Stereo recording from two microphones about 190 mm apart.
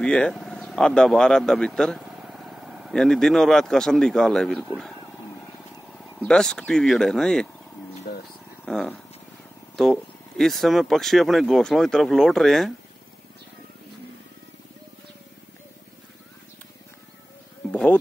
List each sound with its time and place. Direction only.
0.0 s speech: 5° left (ahead or behind)
6.1 s speech: 5° left (ahead or behind)
8.1 s a sound: 55° left (ahead or behind)
8.6 s speech: centre (ahead or behind)
17.6 s insect: 5° left (ahead or behind)